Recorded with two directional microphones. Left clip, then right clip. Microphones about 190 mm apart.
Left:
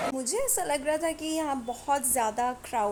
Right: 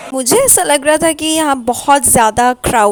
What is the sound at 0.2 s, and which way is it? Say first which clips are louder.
A woman's voice: right 18 dB; 50° right (ahead or behind).